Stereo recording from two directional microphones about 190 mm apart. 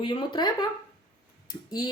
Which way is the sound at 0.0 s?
25° left (ahead or behind).